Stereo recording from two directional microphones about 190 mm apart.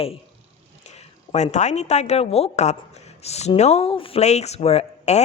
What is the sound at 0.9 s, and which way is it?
A woman's voice, 35° left (ahead or behind).